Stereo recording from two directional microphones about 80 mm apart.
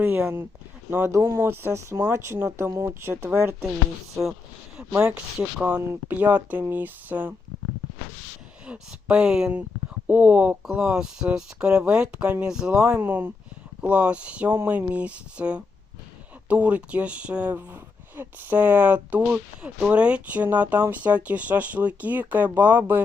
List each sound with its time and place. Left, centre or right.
0.0 s speech: right
5.5 s speech: centre
5.8 s speech: right
6.1 s speech: centre
8.6 s speech: centre
10.1 s speech: centre
10.7 s speech: centre
13.0 s speech: right
13.8 s speech: centre